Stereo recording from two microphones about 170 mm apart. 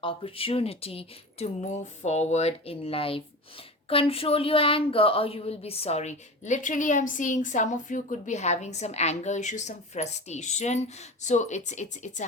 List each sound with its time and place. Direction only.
0.0 s a woman's voice: 35° left (ahead or behind)